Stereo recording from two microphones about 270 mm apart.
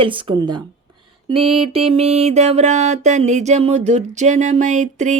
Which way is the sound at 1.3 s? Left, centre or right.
Centre.